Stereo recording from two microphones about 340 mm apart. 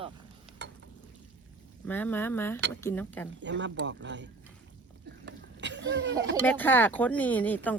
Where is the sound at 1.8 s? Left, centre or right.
Centre.